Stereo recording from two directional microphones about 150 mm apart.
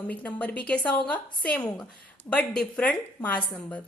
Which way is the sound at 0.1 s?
10° left (ahead or behind).